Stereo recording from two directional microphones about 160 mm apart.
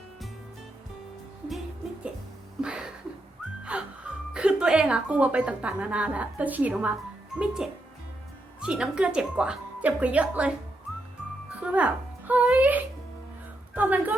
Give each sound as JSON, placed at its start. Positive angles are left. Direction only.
{"t": 2.6, "sound": "music", "side_deg": -5}
{"t": 3.6, "sound": "speech", "side_deg": -5}
{"t": 11.6, "sound": "a woman's voice", "side_deg": -10}